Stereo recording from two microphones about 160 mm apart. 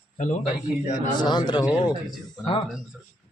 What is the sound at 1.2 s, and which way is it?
Speech, 30° left (ahead or behind).